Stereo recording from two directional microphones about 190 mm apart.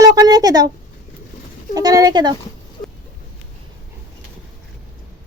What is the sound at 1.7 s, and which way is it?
Speech, 20° right (ahead or behind).